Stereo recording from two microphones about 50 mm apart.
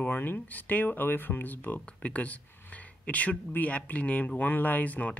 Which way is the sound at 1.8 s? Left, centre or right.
Left.